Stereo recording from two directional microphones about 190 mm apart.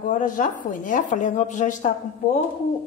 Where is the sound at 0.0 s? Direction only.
45° left (ahead or behind).